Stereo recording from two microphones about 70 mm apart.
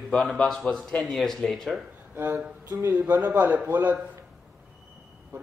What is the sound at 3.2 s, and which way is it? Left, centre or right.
Speech, right.